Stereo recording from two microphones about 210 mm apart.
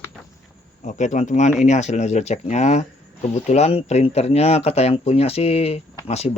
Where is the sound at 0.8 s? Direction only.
35° left (ahead or behind).